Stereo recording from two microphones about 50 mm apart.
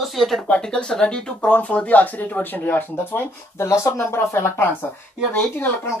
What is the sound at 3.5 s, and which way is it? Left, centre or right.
Speech, left.